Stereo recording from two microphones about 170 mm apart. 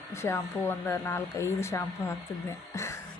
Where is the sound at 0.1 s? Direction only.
15° left (ahead or behind).